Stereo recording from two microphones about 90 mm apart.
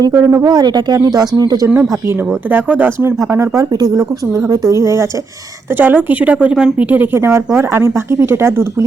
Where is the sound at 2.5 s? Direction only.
20° right (ahead or behind).